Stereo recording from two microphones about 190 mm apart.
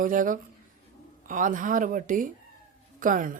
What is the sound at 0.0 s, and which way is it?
Speech, 45° right (ahead or behind).